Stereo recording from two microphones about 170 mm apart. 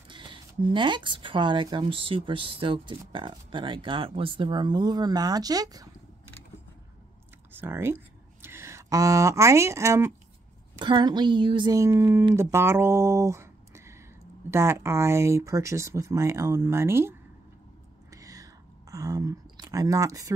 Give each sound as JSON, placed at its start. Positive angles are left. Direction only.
{"t": 0.1, "sound": "speech", "side_deg": -30}
{"t": 7.5, "sound": "speech", "side_deg": -15}
{"t": 10.8, "sound": "speech", "side_deg": -25}
{"t": 18.1, "sound": "a sound", "side_deg": -20}